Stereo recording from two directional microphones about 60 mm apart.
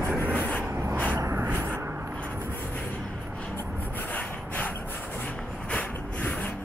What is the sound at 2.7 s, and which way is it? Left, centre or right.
Vehicle, left.